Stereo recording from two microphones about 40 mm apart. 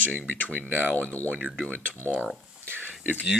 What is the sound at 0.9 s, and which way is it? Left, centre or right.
Speech, left.